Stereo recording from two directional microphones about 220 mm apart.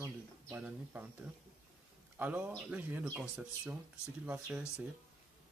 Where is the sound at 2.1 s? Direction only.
10° right (ahead or behind).